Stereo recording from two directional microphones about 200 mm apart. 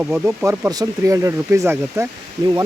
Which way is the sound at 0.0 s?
10° right (ahead or behind).